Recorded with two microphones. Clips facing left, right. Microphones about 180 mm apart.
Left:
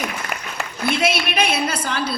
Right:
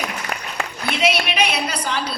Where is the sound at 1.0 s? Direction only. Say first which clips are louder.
Right 3 dB; 50° left (ahead or behind).